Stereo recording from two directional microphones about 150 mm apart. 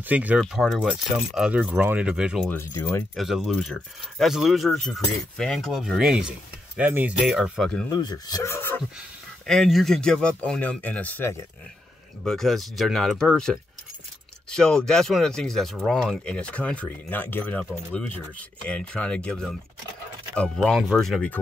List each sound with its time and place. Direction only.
0.0 s speech: 10° right (ahead or behind)
0.4 s speech: centre (ahead or behind)
2.5 s speech: 15° left (ahead or behind)
3.2 s speech: centre (ahead or behind)
7.9 s speech: 25° left (ahead or behind)
9.5 s speech: centre (ahead or behind)
12.2 s speech: centre (ahead or behind)